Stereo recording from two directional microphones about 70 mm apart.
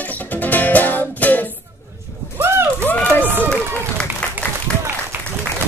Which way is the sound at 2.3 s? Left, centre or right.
Right.